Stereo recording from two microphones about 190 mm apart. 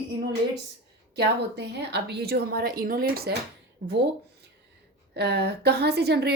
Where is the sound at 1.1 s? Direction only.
60° right (ahead or behind).